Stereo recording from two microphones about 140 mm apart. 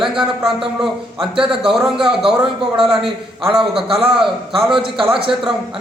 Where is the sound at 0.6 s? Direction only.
5° right (ahead or behind).